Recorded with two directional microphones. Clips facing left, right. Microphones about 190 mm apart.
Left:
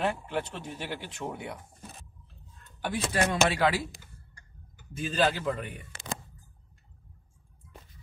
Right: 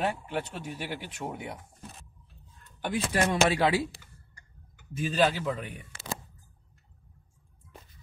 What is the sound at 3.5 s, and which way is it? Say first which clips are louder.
Speech: right 1 dB; 20° right (ahead or behind).